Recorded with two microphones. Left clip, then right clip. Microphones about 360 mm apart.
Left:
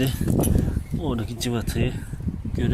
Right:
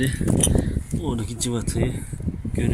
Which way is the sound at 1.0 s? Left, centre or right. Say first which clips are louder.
Left 1 dB; centre.